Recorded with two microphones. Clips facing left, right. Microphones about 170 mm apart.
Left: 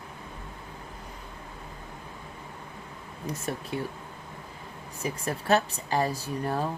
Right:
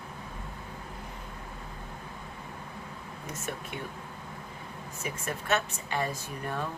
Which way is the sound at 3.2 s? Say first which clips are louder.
Left 5 dB; 35° left (ahead or behind).